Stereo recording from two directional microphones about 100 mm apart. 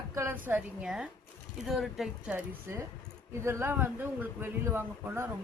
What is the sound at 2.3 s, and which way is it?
Speech, 30° right (ahead or behind).